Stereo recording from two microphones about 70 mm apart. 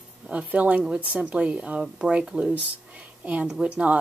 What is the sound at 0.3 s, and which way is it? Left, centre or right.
Speech, centre.